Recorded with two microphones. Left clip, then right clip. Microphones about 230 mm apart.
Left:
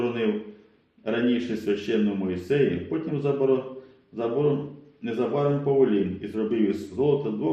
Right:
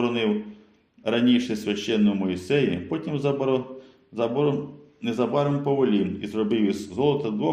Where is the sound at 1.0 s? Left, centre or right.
Right.